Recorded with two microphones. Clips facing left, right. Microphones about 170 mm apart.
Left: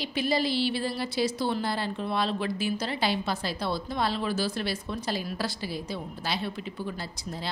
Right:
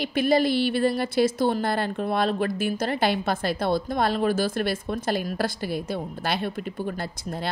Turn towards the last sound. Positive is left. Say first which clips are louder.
# right 5 dB
turn(degrees=-50)  # may be behind; listen again after turning